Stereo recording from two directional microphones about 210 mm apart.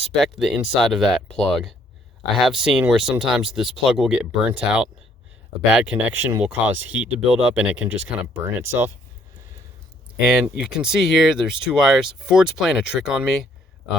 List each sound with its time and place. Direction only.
0.2 s speech: centre (ahead or behind)
10.2 s speech: 5° right (ahead or behind)